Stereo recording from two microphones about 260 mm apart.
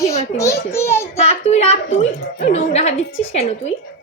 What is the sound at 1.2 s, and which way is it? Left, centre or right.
Speech, left.